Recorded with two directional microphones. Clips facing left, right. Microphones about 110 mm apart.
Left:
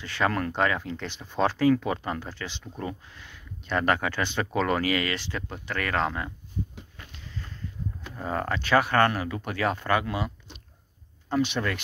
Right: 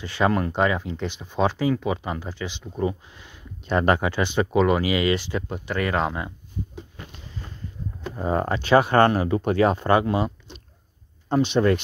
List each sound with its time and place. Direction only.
0.0 s speech: 15° right (ahead or behind)
8.0 s speech: 20° right (ahead or behind)